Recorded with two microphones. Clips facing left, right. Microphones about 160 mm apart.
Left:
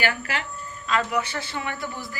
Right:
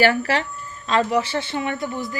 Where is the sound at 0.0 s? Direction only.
35° right (ahead or behind).